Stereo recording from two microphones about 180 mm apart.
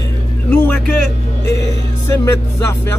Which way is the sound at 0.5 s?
10° left (ahead or behind).